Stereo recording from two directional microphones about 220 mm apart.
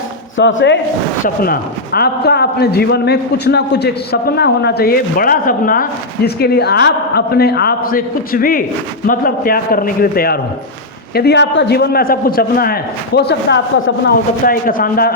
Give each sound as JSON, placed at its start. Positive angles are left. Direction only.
{"t": 0.3, "sound": "a man's voice", "side_deg": 55}
{"t": 1.2, "sound": "a man's voice", "side_deg": 40}
{"t": 14.4, "sound": "a man's voice", "side_deg": 40}